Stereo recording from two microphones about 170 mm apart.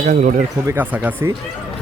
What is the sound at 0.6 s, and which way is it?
Speech, 10° right (ahead or behind).